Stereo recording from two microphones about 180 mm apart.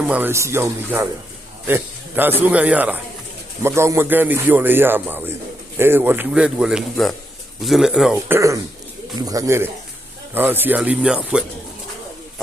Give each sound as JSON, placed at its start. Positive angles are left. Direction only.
{"t": 0.0, "sound": "a man's voice", "side_deg": -10}